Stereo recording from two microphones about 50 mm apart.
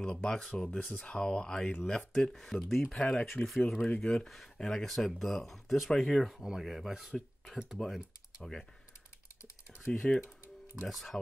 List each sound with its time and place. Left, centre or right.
0.0 s speech: centre
4.0 s speech: centre
8.4 s speech: centre
10.0 s speech: centre
10.9 s speech: centre